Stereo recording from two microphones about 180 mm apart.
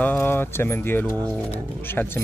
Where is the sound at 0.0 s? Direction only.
10° left (ahead or behind).